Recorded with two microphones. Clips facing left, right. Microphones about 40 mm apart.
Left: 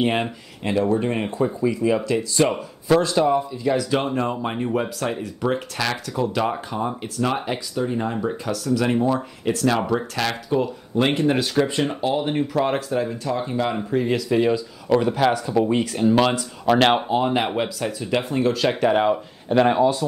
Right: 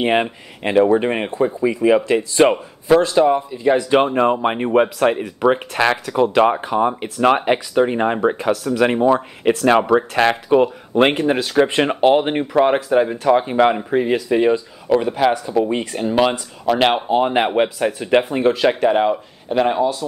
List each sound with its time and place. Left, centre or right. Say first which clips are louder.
0.0 s speech: right 4 dB; right
2.5 s speech: right 4 dB; centre; by 13.3 s right
13.3 s speech: right 11 dB; right
14.9 s speech: right 2 dB; centre
17.6 s speech: right 7 dB; right
18.7 s speech: right 3 dB; centre